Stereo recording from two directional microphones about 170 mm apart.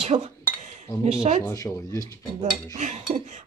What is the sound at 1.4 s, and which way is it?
Speech, 20° left (ahead or behind).